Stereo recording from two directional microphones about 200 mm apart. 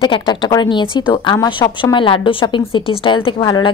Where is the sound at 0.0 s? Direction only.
25° left (ahead or behind).